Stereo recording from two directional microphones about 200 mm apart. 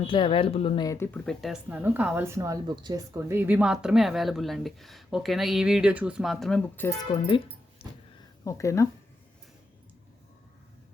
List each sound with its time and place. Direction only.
0.1 s speech: 25° left (ahead or behind)
0.9 s speech: 10° left (ahead or behind)